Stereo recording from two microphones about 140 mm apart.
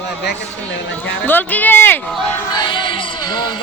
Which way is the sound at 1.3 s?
10° left (ahead or behind).